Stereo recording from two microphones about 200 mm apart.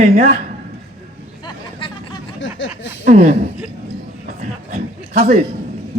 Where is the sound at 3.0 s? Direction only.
40° right (ahead or behind).